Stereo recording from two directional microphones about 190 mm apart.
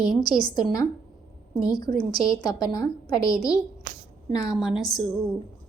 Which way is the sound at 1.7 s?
20° left (ahead or behind).